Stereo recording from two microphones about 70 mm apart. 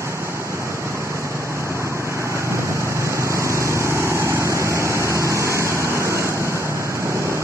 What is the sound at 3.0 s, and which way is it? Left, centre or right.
Vehicle, right.